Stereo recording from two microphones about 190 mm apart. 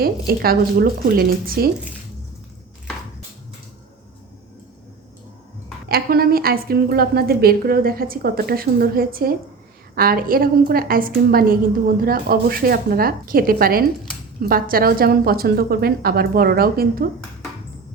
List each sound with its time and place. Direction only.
0.0 s a woman's voice: 50° right (ahead or behind)
5.9 s a woman's voice: 55° right (ahead or behind)